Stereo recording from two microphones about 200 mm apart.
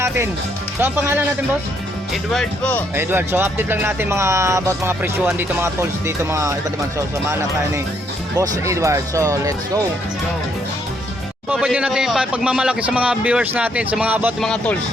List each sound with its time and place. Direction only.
0.8 s speech: 10° right (ahead or behind)
2.3 s a man's voice: 5° left (ahead or behind)
2.9 s speech: 10° right (ahead or behind)
8.4 s speech: 15° right (ahead or behind)
11.5 s a man's voice: 5° right (ahead or behind)
14.4 s a man's voice: 5° left (ahead or behind)